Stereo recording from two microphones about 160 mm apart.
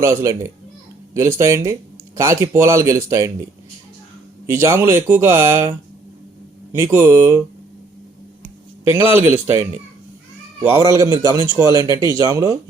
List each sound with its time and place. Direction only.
0.0 s speech: 15° right (ahead or behind)
4.4 s speech: 15° right (ahead or behind)
6.7 s speech: 15° right (ahead or behind)
8.9 s a man's voice: 15° right (ahead or behind)